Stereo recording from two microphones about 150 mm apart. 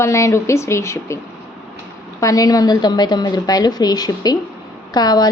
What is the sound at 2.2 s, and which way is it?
A woman's voice, 25° left (ahead or behind).